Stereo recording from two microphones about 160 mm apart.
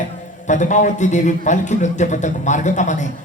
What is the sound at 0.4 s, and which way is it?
A man's voice, 50° left (ahead or behind).